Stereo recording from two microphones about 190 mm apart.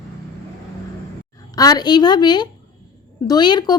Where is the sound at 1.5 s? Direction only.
20° left (ahead or behind).